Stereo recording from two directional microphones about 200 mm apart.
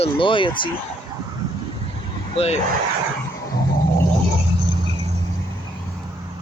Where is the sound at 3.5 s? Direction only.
15° left (ahead or behind).